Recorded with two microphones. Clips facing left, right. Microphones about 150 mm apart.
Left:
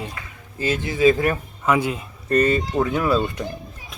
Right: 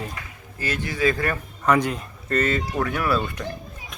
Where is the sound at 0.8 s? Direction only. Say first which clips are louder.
Left 6 dB; 20° left (ahead or behind).